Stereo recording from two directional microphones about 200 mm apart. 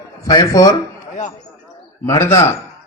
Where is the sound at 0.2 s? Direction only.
20° left (ahead or behind).